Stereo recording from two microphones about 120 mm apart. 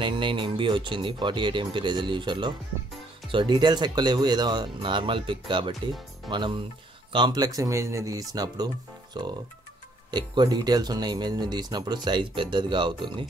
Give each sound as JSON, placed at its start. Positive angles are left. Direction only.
{"t": 0.0, "sound": "speech", "side_deg": -40}